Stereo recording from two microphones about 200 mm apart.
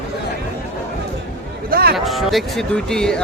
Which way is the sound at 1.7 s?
50° right (ahead or behind).